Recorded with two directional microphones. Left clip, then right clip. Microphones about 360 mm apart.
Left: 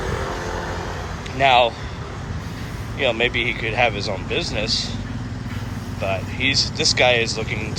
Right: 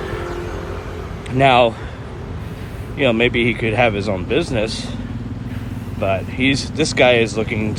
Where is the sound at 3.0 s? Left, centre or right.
Centre.